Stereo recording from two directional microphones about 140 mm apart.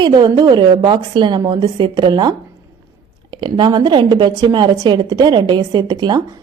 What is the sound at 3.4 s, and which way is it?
A woman's voice, 30° right (ahead or behind).